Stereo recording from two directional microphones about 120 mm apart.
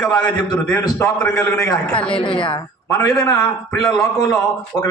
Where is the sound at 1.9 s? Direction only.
10° left (ahead or behind).